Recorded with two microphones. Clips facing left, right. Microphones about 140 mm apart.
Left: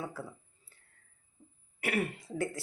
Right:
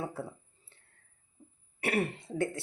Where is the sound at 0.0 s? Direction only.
25° right (ahead or behind).